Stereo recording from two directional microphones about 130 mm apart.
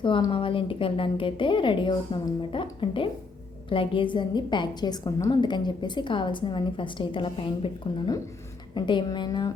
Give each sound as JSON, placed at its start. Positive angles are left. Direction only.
{"t": 0.0, "sound": "a woman's voice", "side_deg": 40}